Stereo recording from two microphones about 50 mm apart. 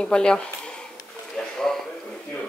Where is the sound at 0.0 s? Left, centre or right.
Centre.